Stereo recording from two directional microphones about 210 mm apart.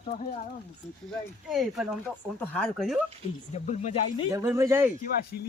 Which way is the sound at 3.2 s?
30° left (ahead or behind).